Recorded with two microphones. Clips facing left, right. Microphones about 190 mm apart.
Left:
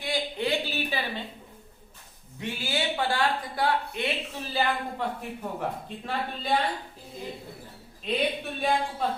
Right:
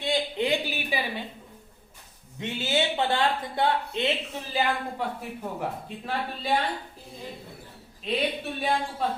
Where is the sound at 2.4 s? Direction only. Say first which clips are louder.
Right 4 dB; 20° right (ahead or behind).